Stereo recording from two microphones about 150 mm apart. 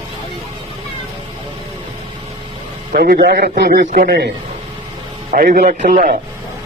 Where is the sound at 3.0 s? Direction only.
85° right.